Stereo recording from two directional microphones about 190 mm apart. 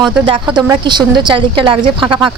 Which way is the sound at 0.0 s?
25° right (ahead or behind).